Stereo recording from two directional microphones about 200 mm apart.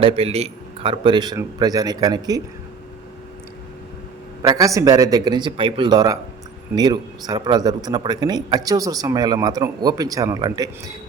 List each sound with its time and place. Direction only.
0.0 s a man's voice: 30° right (ahead or behind)
4.4 s a man's voice: 15° right (ahead or behind)